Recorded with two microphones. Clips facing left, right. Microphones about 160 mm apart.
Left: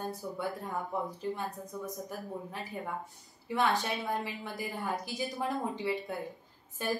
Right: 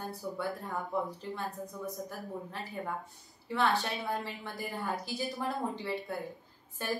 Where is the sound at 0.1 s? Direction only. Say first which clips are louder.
Even; 20° left (ahead or behind).